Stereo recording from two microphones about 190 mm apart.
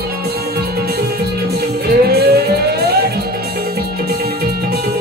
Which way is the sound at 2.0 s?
55° right (ahead or behind).